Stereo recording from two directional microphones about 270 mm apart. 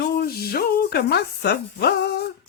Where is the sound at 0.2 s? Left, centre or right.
Left.